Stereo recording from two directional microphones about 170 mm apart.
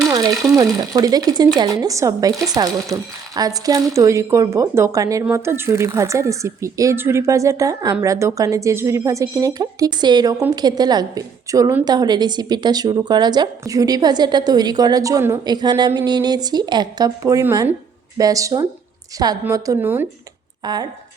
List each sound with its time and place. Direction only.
0.1 s a woman's voice: 20° right (ahead or behind)
20.6 s a woman's voice: 25° right (ahead or behind)